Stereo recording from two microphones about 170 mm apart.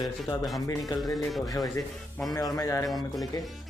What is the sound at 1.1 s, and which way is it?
Speech, centre (ahead or behind).